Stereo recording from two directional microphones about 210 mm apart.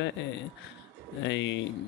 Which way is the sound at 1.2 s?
60° left (ahead or behind).